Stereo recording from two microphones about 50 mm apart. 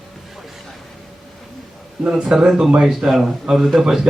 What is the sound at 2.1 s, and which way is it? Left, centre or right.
Speech, centre.